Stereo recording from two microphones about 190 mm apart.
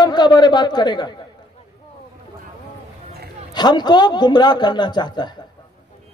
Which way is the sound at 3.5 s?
20° left (ahead or behind).